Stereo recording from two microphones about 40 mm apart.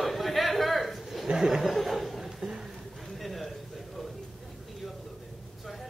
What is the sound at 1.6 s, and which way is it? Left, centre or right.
Chuckle, centre.